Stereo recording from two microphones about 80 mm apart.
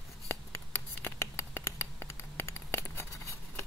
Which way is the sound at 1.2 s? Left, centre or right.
Left.